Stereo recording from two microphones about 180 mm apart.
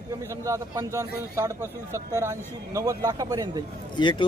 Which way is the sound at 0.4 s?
15° right (ahead or behind).